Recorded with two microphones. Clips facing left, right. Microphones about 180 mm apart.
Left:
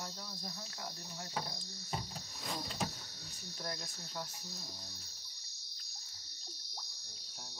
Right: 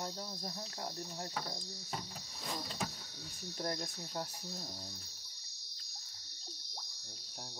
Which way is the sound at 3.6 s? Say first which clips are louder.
Right 5 dB; 40° right (ahead or behind).